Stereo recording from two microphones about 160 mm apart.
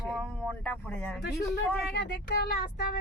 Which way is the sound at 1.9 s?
90° left.